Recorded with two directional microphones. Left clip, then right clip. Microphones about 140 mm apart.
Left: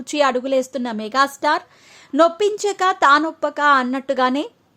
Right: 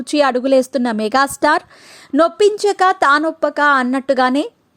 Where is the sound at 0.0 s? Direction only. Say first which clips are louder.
Right 3 dB; 35° right (ahead or behind); by 1.6 s 55° right (ahead or behind).